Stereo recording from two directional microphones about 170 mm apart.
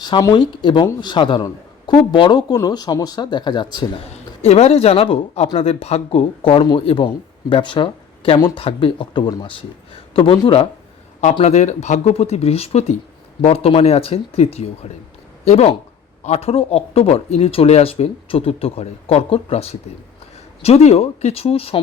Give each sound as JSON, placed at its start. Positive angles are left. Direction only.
{"t": 0.0, "sound": "a man's voice", "side_deg": 20}
{"t": 4.1, "sound": "a man's voice", "side_deg": 40}